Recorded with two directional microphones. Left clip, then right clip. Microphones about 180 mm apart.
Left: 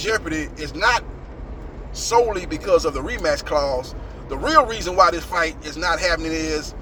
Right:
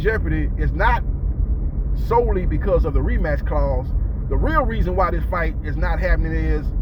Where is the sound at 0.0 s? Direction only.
15° left (ahead or behind).